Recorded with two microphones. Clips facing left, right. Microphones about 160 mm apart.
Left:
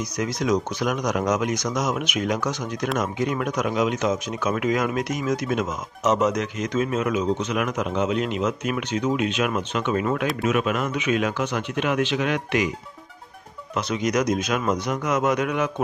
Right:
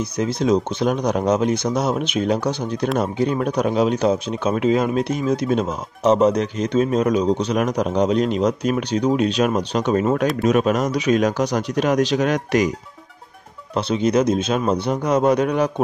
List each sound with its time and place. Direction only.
0.2 s speech: 30° right (ahead or behind)
13.7 s speech: 30° right (ahead or behind)